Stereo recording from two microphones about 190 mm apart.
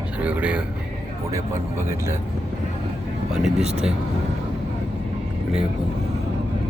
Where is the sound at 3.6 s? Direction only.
35° right (ahead or behind).